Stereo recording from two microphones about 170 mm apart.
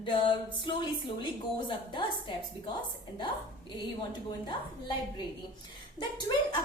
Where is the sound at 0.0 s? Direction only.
30° left (ahead or behind).